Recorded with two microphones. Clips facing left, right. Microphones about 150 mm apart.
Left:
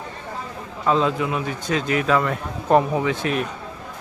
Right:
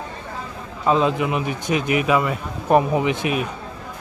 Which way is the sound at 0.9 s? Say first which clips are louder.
Right 2 dB; 15° right (ahead or behind).